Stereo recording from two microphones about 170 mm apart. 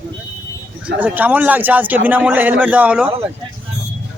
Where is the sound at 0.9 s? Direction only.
10° right (ahead or behind).